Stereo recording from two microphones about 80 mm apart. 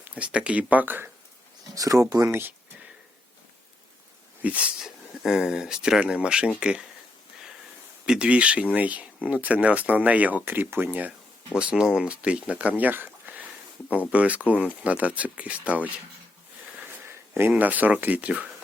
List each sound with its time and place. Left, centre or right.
0.2 s speech: centre
1.7 s speech: right
4.4 s speech: centre
8.0 s speech: centre
17.5 s speech: centre